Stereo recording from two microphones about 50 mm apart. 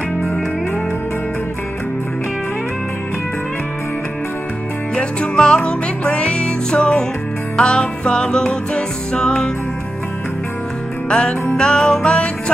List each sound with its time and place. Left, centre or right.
4.9 s music: centre
11.1 s music: centre